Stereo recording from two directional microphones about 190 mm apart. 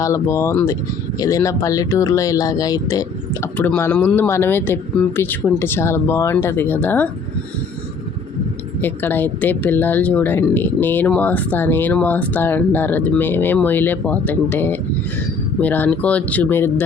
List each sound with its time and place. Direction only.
0.0 s speech: 15° left (ahead or behind)
8.8 s speech: 10° left (ahead or behind)